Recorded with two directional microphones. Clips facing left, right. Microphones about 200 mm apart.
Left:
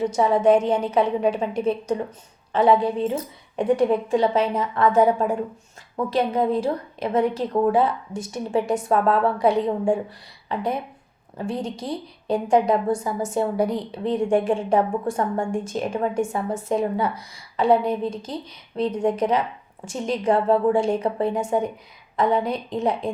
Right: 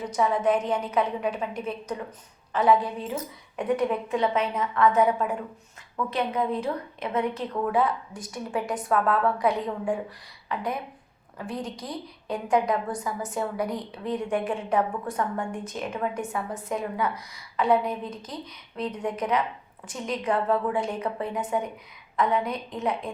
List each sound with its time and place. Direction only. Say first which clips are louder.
0.0 s a woman's voice: left 6 dB; 30° left (ahead or behind)